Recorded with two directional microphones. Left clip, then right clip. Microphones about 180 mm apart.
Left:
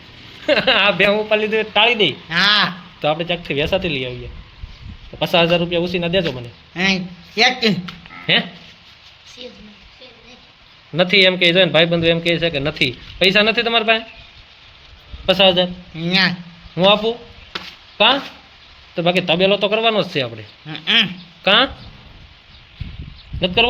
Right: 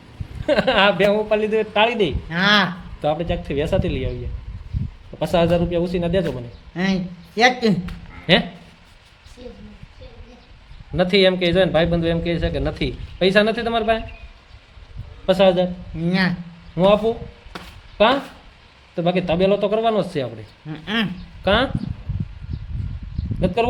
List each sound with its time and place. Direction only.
0.4 s a man's voice: 10° left (ahead or behind)
2.3 s a man's voice: 25° right (ahead or behind)
3.0 s a man's voice: 5° left (ahead or behind)
5.2 s a man's voice: 5° left (ahead or behind)
6.7 s a man's voice: 30° right (ahead or behind)
10.9 s a man's voice: 15° left (ahead or behind)
15.3 s a man's voice: centre (ahead or behind)
16.0 s a man's voice: 25° right (ahead or behind)
16.7 s a man's voice: 5° left (ahead or behind)
20.7 s a man's voice: 25° right (ahead or behind)
21.4 s a man's voice: 10° left (ahead or behind)